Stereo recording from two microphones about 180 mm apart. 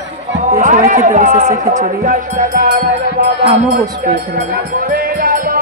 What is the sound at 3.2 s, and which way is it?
Music, 45° right (ahead or behind).